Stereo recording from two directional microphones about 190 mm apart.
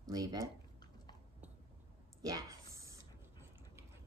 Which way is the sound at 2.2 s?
20° right (ahead or behind).